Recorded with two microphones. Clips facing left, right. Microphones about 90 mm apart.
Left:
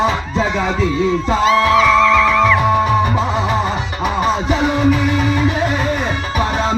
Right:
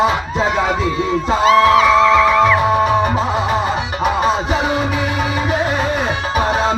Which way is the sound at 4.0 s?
15° right (ahead or behind).